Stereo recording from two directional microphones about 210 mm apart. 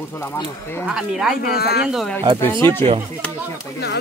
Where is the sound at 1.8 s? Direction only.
Centre (ahead or behind).